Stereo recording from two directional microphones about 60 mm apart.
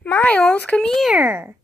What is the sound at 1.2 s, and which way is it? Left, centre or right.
Speech, right.